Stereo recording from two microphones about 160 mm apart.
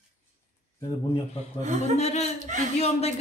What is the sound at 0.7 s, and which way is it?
Speech, 20° left (ahead or behind).